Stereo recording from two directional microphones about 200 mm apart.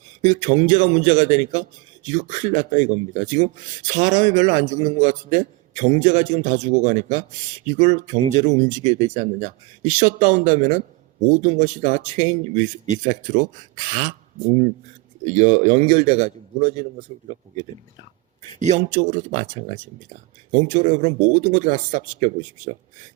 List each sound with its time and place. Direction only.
0.2 s speech: 35° right (ahead or behind)
15.3 s speech: 35° right (ahead or behind)
18.6 s speech: 35° right (ahead or behind)